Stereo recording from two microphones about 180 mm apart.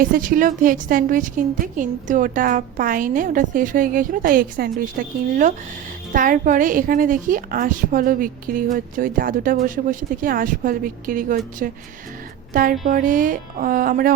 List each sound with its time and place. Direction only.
0.0 s a woman's voice: 50° right (ahead or behind)